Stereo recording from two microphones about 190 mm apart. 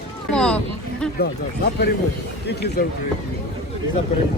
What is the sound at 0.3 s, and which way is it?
Speech, 5° left (ahead or behind).